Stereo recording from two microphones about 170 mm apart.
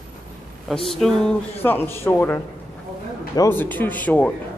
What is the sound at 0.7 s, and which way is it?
Speech, centre (ahead or behind).